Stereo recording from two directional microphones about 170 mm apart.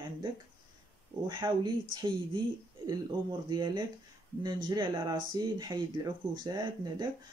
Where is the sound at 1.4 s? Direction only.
20° right (ahead or behind).